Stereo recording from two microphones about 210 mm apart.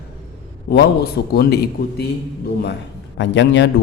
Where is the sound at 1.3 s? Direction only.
50° left (ahead or behind).